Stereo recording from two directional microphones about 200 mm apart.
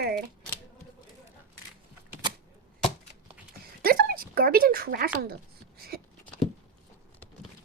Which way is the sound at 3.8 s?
50° right (ahead or behind).